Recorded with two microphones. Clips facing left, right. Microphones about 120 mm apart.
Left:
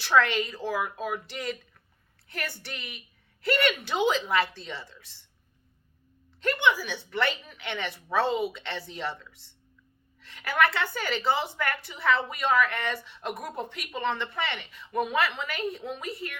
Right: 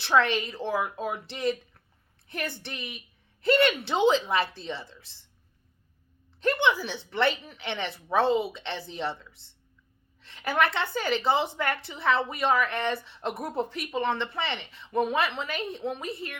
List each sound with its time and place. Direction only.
0.0 s a woman's voice: 25° right (ahead or behind)
6.4 s a woman's voice: 25° right (ahead or behind)